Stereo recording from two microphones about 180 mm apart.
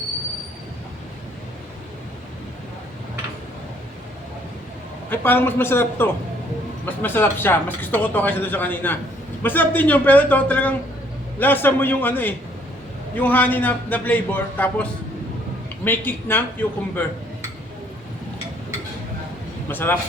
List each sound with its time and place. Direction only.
5.0 s speech: 10° left (ahead or behind)
19.7 s speech: 10° left (ahead or behind)